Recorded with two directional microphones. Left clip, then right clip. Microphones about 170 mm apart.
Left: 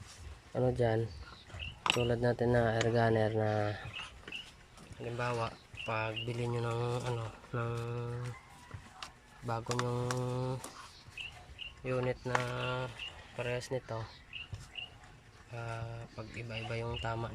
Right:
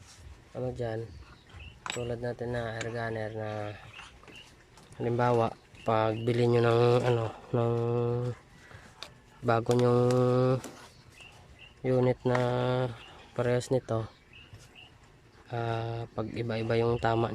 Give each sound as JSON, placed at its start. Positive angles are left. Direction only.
{"t": 0.5, "sound": "speech", "side_deg": 5}
{"t": 1.8, "sound": "a sound", "side_deg": 15}
{"t": 2.0, "sound": "speech", "side_deg": 0}
{"t": 4.9, "sound": "speech", "side_deg": -40}
{"t": 7.5, "sound": "speech", "side_deg": -35}
{"t": 9.8, "sound": "mantra", "side_deg": -70}
{"t": 10.2, "sound": "speech", "side_deg": -65}
{"t": 11.8, "sound": "speech", "side_deg": -35}
{"t": 15.5, "sound": "speech", "side_deg": -60}